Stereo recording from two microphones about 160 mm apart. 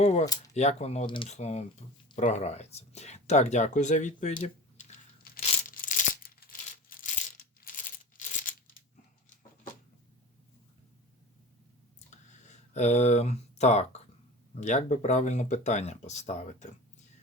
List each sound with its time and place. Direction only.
0.0 s speech: 45° left (ahead or behind)
1.0 s speech: 30° left (ahead or behind)
1.3 s speech: 45° left (ahead or behind)
4.4 s a sound: 45° left (ahead or behind)
5.2 s tearing: 60° left (ahead or behind)
6.9 s crushing: 60° left (ahead or behind)
7.6 s coin: 55° left (ahead or behind)
11.9 s a sound: 45° left (ahead or behind)
14.6 s speech: 50° left (ahead or behind)